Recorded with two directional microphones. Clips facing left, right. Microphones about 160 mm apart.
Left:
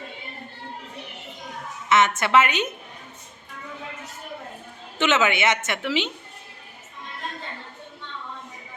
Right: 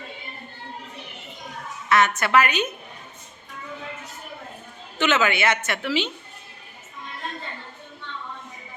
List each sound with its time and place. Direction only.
1.9 s a woman's voice: 20° left (ahead or behind)
4.9 s a woman's voice: 20° left (ahead or behind)